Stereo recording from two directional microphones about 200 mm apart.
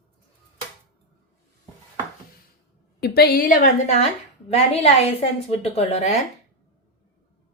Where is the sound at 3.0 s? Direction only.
50° left (ahead or behind).